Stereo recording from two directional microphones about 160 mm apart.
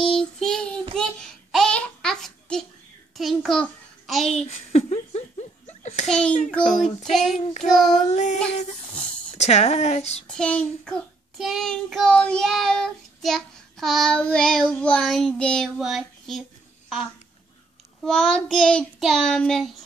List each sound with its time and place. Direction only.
0.0 s child singing: 5° left (ahead or behind)
0.9 s a sound: 5° left (ahead or behind)
3.2 s a child's voice: centre (ahead or behind)
4.7 s a sound: 45° left (ahead or behind)
6.0 s child singing: 5° left (ahead or behind)
8.1 s speech: 45° left (ahead or behind)
9.4 s speech: 45° left (ahead or behind)
10.2 s child singing: 5° left (ahead or behind)
18.0 s child singing: 5° left (ahead or behind)